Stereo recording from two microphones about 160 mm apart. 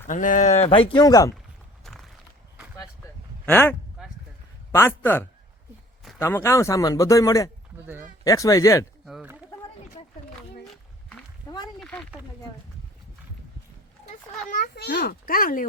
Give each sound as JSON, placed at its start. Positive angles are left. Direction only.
{"t": 0.1, "sound": "speech", "side_deg": 55}
{"t": 1.8, "sound": "walk", "side_deg": 0}
{"t": 3.4, "sound": "a man's voice", "side_deg": 10}
{"t": 11.4, "sound": "a sound", "side_deg": 25}
{"t": 11.8, "sound": "a sound", "side_deg": 5}
{"t": 14.5, "sound": "a child's voice", "side_deg": 75}